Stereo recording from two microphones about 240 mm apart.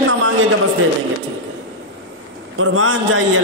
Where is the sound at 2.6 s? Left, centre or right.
Right.